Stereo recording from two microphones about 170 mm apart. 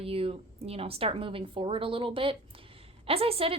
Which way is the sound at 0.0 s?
35° right (ahead or behind).